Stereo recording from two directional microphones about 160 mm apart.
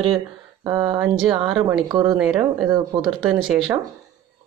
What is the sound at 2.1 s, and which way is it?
A woman's voice, 5° right (ahead or behind).